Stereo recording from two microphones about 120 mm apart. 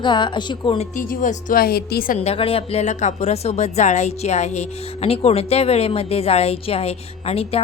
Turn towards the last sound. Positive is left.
turn(degrees=55)  # may be behind; listen again after turning